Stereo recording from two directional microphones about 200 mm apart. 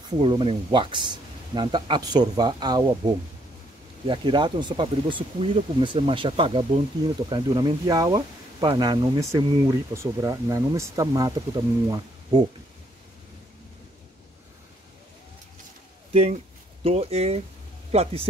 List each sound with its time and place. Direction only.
0.2 s speech: 25° right (ahead or behind)
16.1 s speech: 30° right (ahead or behind)